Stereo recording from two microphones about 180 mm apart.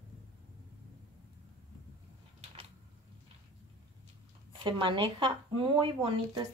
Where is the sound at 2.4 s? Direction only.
35° right (ahead or behind).